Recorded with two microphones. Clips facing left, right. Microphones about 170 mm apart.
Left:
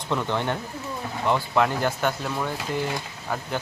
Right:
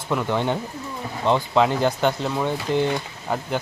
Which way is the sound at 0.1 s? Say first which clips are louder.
Right 3 dB; 10° right (ahead or behind).